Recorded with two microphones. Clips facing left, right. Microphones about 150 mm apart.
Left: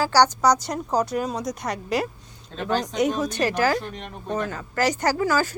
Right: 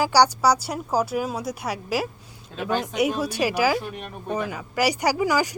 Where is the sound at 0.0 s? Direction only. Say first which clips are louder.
Even; 10° right (ahead or behind).